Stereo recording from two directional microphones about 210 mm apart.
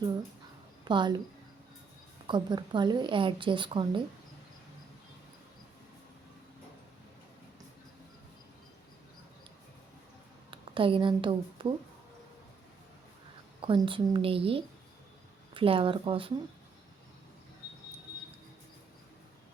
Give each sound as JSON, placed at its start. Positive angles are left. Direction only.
{"t": 0.9, "sound": "a woman's voice", "side_deg": -20}
{"t": 2.2, "sound": "a woman's voice", "side_deg": -20}
{"t": 10.5, "sound": "speech", "side_deg": -25}
{"t": 13.6, "sound": "a woman's voice", "side_deg": -25}